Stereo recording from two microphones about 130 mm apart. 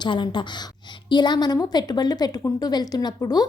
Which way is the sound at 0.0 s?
35° left (ahead or behind).